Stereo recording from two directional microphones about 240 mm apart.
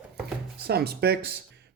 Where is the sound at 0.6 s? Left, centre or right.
Right.